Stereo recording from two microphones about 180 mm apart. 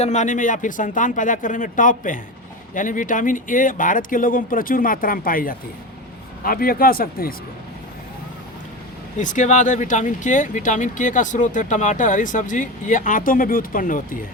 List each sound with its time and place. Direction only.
0.0 s speech: 40° left (ahead or behind)
9.1 s speech: 45° left (ahead or behind)